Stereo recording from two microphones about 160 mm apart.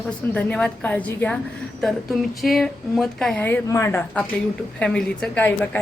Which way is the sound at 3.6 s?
15° left (ahead or behind).